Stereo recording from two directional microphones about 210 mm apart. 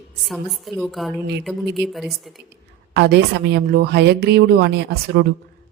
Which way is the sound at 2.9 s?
55° right (ahead or behind).